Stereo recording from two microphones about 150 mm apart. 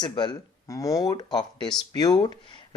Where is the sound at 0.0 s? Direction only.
30° left (ahead or behind).